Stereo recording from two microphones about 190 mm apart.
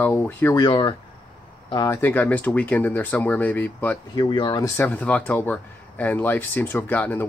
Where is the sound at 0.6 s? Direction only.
25° left (ahead or behind).